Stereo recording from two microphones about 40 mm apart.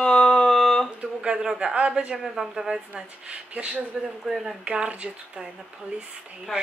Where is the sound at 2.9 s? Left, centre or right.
Right.